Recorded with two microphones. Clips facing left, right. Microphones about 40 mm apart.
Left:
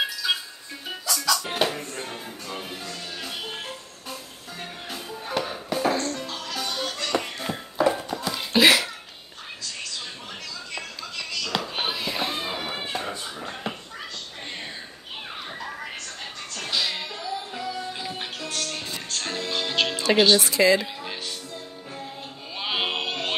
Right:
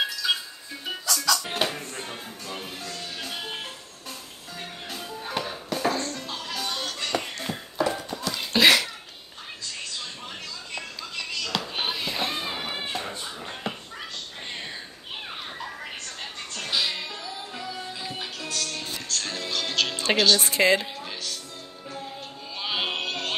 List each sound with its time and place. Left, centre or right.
0.0 s music: centre
6.2 s music: centre
6.5 s music: centre
7.2 s a sound: centre
11.5 s music: centre
12.9 s a sound: centre
16.5 s music: centre
18.5 s music: left
18.8 s music: centre
20.4 s a woman's voice: right
21.0 s music: centre
22.6 s music: centre